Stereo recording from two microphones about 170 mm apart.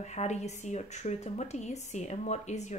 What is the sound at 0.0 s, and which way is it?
Speech, 40° left (ahead or behind).